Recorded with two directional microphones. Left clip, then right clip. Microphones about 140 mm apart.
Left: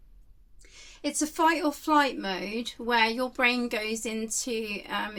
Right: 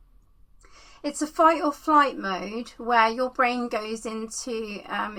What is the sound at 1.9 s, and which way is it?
A woman's voice, 40° left (ahead or behind).